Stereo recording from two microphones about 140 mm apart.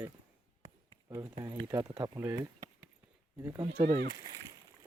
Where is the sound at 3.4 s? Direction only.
20° right (ahead or behind).